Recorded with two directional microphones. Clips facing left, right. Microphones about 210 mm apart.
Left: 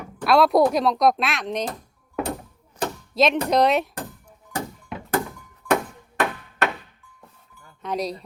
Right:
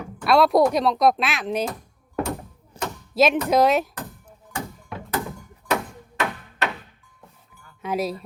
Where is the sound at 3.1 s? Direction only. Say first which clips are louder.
Right 1 dB; 5° right (ahead or behind).